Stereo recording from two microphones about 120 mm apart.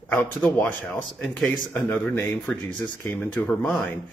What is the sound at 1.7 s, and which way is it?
Speech, 15° left (ahead or behind).